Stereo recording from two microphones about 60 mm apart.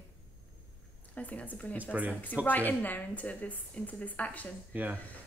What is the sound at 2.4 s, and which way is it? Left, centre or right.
Speech, left.